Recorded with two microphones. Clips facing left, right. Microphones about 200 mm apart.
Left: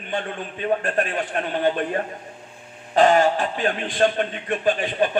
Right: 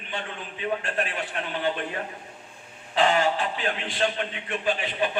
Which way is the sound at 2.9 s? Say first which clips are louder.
Left 6 dB; 45° left (ahead or behind).